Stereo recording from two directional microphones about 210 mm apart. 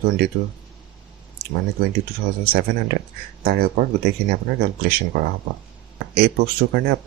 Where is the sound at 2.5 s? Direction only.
45° right (ahead or behind).